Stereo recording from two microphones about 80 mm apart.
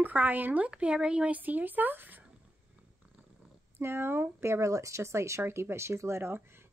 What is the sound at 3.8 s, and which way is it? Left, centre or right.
Speech, right.